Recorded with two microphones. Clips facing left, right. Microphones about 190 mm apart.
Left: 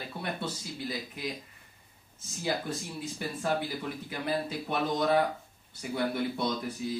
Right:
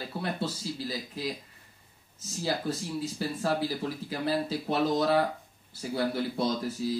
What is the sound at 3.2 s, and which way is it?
Speech, 30° right (ahead or behind).